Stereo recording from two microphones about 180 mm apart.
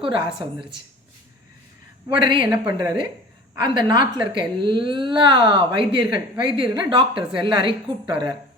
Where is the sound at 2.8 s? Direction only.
20° right (ahead or behind).